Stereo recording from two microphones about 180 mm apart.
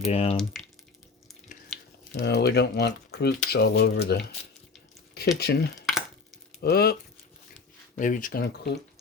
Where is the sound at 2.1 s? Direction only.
65° left (ahead or behind).